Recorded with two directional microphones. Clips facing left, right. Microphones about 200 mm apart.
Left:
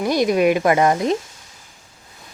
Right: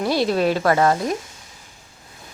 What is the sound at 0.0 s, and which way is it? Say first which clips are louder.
Speech: left 3 dB; 15° left (ahead or behind).